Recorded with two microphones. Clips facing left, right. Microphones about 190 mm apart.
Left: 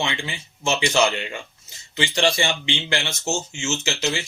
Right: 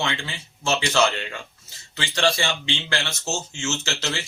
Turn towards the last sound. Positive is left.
turn(degrees=15)  # may be behind; listen again after turning